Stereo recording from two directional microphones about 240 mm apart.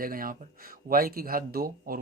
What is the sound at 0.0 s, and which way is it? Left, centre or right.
Speech, right.